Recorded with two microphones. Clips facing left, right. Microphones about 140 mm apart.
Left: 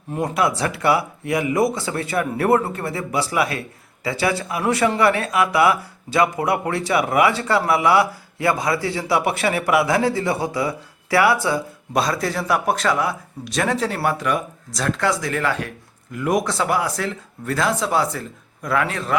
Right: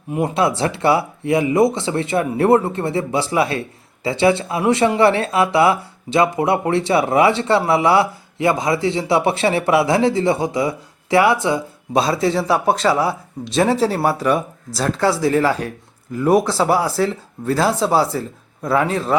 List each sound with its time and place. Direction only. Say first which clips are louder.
0.2 s a man's voice: right 3 dB; 25° right (ahead or behind)